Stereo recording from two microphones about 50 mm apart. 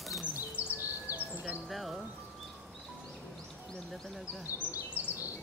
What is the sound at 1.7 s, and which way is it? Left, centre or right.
Speech, centre.